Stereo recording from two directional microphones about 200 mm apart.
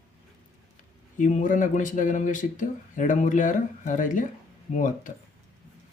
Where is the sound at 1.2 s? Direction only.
40° left (ahead or behind).